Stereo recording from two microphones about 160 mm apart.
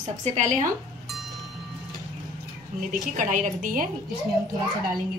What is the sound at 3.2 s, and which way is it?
Speech, 50° right (ahead or behind).